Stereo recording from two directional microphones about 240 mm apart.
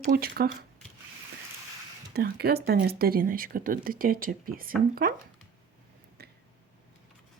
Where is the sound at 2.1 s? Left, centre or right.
Right.